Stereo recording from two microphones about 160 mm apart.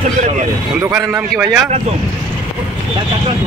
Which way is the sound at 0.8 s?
20° right (ahead or behind).